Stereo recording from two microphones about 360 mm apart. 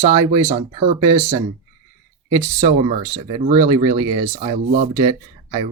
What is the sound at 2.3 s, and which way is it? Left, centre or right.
Speech, centre.